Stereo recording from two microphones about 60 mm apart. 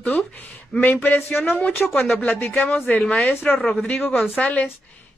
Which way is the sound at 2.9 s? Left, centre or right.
Left.